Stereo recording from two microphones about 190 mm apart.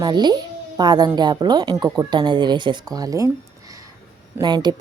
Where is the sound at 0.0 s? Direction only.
20° right (ahead or behind).